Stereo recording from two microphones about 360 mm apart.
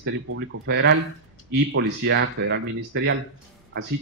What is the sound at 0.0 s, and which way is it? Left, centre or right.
Speech, right.